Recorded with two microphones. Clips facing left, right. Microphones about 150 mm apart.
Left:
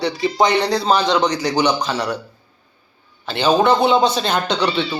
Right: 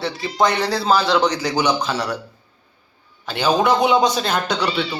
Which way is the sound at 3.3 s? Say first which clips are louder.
Left 2 dB; 10° right (ahead or behind).